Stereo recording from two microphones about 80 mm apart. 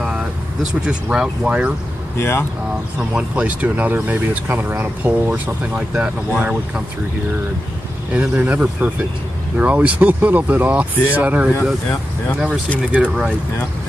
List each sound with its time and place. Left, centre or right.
0.0 s vehicle: centre
0.8 s speech: centre
2.1 s speech: left
3.0 s speech: centre
5.3 s speech: centre
8.1 s speech: centre
12.9 s speech: centre